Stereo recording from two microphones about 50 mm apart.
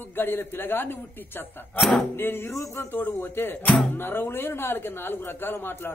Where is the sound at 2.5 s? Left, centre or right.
Left.